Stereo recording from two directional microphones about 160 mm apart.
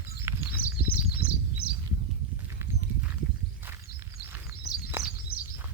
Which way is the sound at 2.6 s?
15° right (ahead or behind).